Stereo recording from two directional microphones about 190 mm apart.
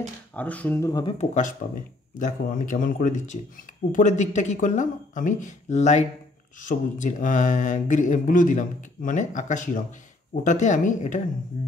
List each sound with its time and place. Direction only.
0.3 s speech: 10° left (ahead or behind)
1.1 s speech: 40° left (ahead or behind)